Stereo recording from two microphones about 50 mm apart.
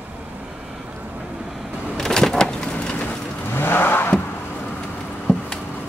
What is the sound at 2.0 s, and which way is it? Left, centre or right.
Vehicle, centre.